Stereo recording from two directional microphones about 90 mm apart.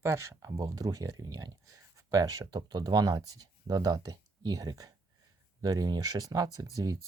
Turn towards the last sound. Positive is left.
turn(degrees=-45)  # may be behind; listen again after turning